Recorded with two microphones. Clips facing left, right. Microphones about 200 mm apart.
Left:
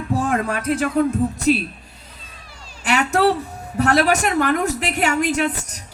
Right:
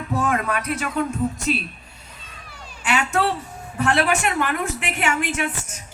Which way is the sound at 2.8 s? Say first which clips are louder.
Left 4 dB; 40° left (ahead or behind).